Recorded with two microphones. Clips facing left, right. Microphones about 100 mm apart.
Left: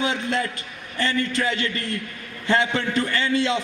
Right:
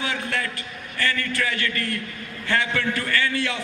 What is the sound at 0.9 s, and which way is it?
A man's voice, 25° left (ahead or behind).